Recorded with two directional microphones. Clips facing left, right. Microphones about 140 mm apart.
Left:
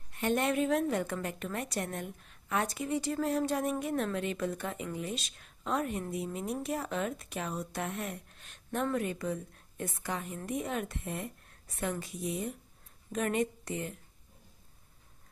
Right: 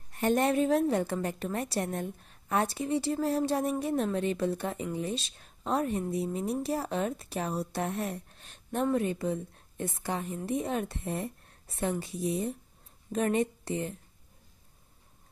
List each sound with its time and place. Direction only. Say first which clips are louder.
0.1 s a woman's voice: right 4 dB; 40° right (ahead or behind)